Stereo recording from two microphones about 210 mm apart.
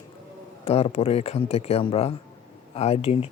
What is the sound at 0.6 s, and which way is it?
Speech, 30° left (ahead or behind).